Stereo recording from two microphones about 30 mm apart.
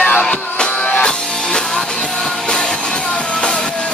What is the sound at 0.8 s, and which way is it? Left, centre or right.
Music, left.